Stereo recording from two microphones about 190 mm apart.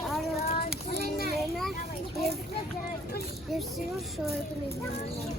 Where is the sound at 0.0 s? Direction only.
Centre (ahead or behind).